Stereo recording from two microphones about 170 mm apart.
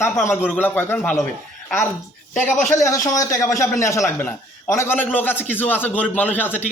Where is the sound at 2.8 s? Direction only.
20° left (ahead or behind).